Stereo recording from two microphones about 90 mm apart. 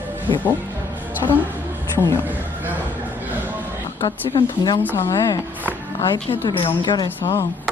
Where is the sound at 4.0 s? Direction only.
70° left (ahead or behind).